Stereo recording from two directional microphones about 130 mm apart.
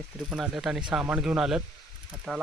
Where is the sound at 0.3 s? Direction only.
5° right (ahead or behind).